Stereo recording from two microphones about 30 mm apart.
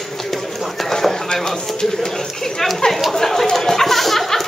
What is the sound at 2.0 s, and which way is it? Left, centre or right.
Chatter, centre.